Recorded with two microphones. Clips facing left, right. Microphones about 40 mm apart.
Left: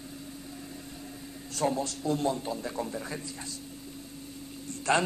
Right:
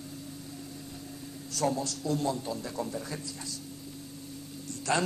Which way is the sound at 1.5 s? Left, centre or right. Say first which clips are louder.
Left 1 dB; left.